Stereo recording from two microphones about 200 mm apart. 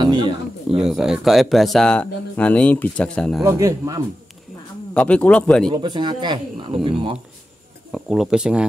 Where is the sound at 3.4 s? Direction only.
15° right (ahead or behind).